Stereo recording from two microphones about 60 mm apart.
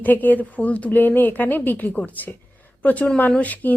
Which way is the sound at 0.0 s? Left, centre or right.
Left.